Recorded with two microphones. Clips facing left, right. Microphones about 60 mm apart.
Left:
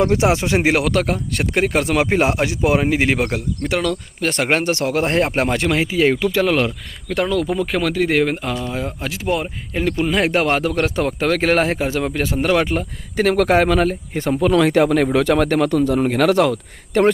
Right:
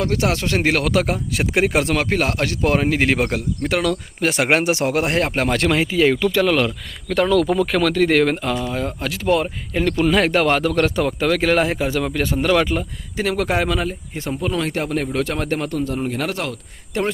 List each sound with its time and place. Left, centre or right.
0.0 s speech: centre
0.9 s a man's voice: centre
2.0 s a man's voice: centre
5.2 s a man's voice: centre
10.2 s speech: left
11.0 s speech: left
13.1 s speech: left
14.3 s a man's voice: left